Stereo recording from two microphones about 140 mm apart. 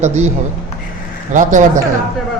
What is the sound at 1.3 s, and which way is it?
Speech, 65° right (ahead or behind).